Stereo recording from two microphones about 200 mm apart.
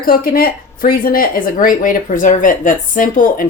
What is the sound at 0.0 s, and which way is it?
A woman's voice, 45° left (ahead or behind).